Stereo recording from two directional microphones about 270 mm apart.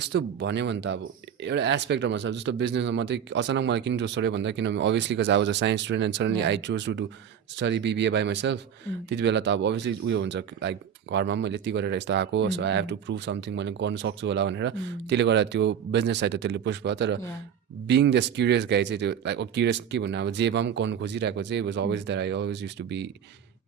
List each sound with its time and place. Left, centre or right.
0.0 s speech: right